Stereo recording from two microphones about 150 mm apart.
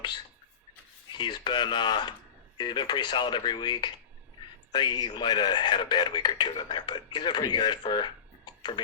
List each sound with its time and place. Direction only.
1.1 s a man's voice: 30° left (ahead or behind)